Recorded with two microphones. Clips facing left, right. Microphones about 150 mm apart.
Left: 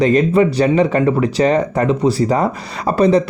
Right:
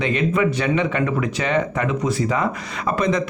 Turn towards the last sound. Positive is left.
turn(degrees=35)  # may be behind; listen again after turning